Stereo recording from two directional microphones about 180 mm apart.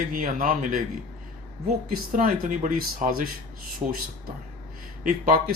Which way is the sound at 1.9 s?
50° right (ahead or behind).